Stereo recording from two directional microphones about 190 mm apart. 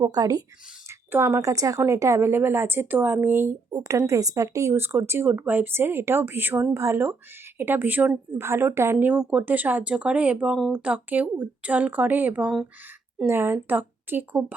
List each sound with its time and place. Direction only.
0.0 s speech: 20° right (ahead or behind)